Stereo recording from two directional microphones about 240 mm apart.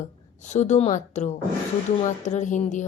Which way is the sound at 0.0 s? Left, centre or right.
Left.